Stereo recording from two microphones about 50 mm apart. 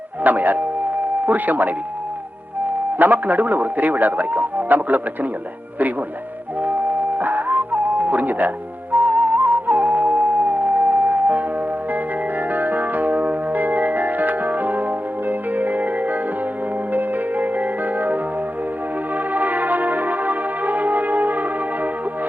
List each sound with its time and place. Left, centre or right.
0.3 s a man's voice: right
3.0 s a man's voice: right
7.2 s music: right
12.5 s music: right
19.3 s music: right